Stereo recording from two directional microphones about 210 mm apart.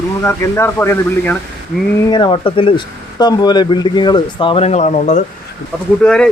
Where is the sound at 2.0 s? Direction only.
20° left (ahead or behind).